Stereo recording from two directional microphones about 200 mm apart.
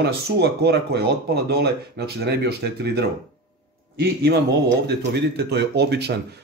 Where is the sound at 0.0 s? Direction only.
55° right (ahead or behind).